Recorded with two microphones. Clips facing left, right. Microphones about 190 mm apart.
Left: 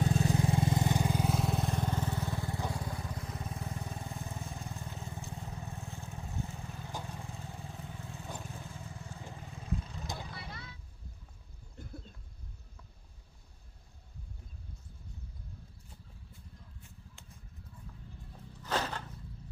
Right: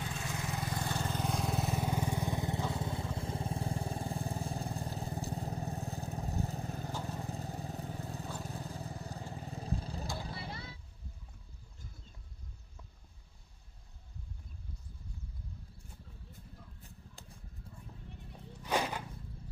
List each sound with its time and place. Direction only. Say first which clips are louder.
0.0 s vehicle: left 10 dB; 40° left (ahead or behind); by 10.8 s 30° right (ahead or behind)
18.3 s music: right 1 dB; 10° right (ahead or behind)